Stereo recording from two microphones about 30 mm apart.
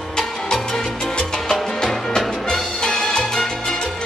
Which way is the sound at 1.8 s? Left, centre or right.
Centre.